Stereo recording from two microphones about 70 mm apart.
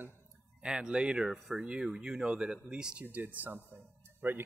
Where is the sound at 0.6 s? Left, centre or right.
Centre.